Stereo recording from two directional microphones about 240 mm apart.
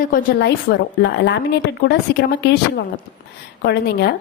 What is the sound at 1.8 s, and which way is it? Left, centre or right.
Speech, left.